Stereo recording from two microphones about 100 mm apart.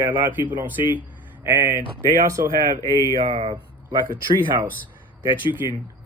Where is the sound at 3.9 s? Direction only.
45° right (ahead or behind).